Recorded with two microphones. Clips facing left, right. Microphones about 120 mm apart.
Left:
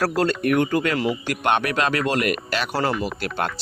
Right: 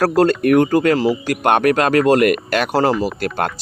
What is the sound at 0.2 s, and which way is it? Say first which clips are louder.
Speech: right 8 dB; 45° right (ahead or behind).